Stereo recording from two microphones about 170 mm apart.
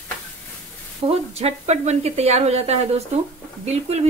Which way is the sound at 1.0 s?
35° right (ahead or behind).